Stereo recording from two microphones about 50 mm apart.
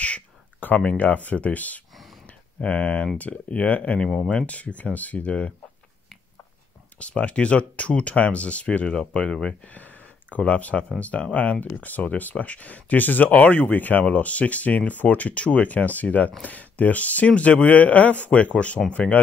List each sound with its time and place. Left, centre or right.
0.0 s a sound: left
0.9 s speech: left
7.0 s speech: left